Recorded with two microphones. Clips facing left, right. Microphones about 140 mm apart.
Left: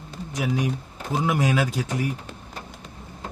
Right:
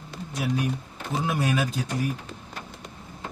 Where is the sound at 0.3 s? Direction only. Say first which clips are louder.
Left 2 dB; 90° left.